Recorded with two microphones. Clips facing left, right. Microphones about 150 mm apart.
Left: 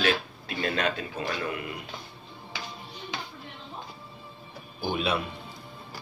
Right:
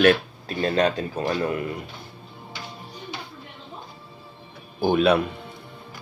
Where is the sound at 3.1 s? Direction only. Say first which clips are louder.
Left 1 dB; 90° left.